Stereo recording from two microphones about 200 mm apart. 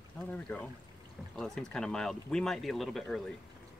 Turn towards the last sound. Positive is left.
turn(degrees=5)  # may be behind; listen again after turning